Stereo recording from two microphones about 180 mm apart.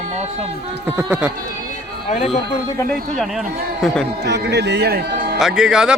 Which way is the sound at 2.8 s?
5° left (ahead or behind).